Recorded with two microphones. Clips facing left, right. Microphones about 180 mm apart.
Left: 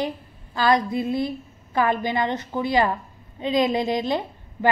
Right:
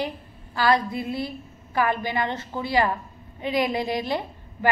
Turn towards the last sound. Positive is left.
turn(degrees=20)  # may be behind; listen again after turning